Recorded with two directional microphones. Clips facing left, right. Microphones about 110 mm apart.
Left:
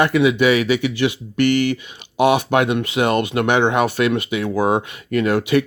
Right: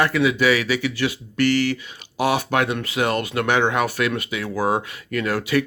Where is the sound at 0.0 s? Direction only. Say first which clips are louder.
Left 4 dB; 20° left (ahead or behind).